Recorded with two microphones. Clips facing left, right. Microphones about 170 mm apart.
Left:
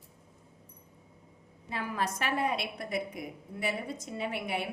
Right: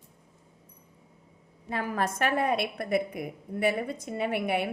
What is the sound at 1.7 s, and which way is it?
A woman's voice, 50° right (ahead or behind).